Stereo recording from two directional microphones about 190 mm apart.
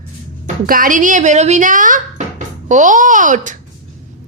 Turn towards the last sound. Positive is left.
turn(degrees=-40)  # may be behind; listen again after turning